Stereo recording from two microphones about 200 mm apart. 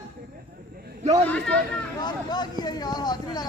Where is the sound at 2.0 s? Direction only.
20° left (ahead or behind).